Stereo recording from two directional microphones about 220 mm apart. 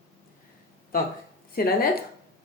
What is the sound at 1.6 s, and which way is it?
Speech, 40° left (ahead or behind).